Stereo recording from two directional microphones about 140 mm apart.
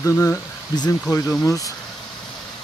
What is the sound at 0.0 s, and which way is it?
Speech, 20° left (ahead or behind).